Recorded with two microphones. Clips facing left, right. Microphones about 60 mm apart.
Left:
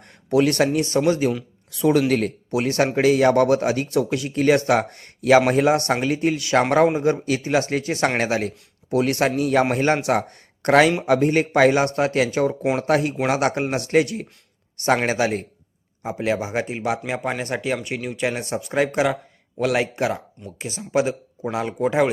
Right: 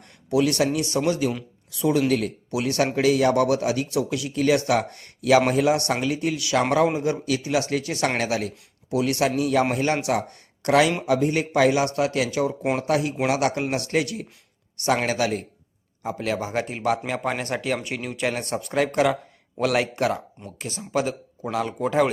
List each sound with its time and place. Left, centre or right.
0.3 s a man's voice: left
1.8 s a man's voice: left
10.2 s a man's voice: left; by 22.1 s centre